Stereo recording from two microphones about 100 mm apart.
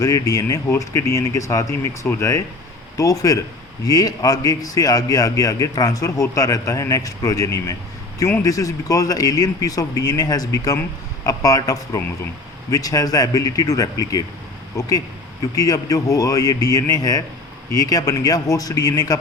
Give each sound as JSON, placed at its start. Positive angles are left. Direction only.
{"t": 0.0, "sound": "a man's voice", "side_deg": 35}